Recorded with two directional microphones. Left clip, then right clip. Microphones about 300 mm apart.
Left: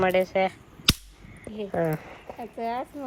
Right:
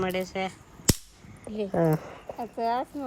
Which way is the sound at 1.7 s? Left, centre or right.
Centre.